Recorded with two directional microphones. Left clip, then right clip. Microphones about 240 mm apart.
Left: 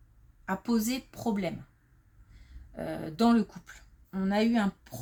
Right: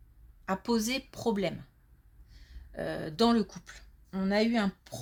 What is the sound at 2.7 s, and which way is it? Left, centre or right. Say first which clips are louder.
Speech: right 2 dB; right.